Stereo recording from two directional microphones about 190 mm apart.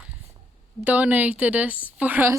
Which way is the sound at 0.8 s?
10° right (ahead or behind).